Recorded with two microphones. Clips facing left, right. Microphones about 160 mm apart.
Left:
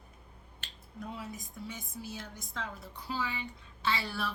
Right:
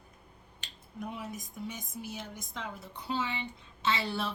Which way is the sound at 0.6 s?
20° right (ahead or behind).